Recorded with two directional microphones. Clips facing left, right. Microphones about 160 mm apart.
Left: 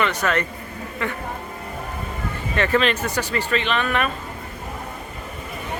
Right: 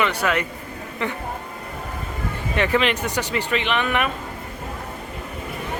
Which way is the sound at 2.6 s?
15° right (ahead or behind).